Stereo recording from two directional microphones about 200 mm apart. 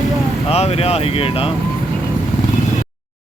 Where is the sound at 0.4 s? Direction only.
30° left (ahead or behind).